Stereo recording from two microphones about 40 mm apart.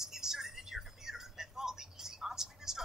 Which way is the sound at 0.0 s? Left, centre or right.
Centre.